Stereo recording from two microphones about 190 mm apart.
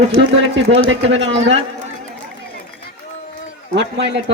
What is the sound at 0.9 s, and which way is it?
Speech, 75° right (ahead or behind).